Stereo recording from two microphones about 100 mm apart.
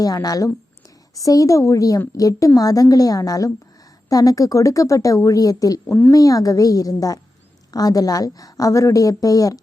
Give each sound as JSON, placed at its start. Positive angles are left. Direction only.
{"t": 0.0, "sound": "speech", "side_deg": 40}
{"t": 5.9, "sound": "speech", "side_deg": 25}
{"t": 6.1, "sound": "speech", "side_deg": 35}